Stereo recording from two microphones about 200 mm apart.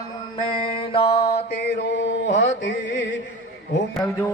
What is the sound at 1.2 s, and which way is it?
Mantra, 55° left (ahead or behind).